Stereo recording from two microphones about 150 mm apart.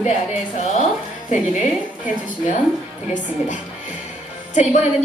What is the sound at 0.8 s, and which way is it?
Speech, 50° left (ahead or behind).